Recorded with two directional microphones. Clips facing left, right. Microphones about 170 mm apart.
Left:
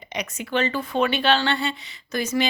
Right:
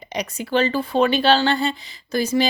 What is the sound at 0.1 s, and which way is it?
Speech, 35° right (ahead or behind).